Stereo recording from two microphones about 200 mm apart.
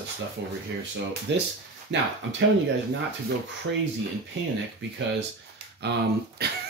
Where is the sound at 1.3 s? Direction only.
60° right (ahead or behind).